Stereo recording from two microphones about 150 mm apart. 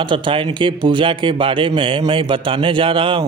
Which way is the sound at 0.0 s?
30° right (ahead or behind).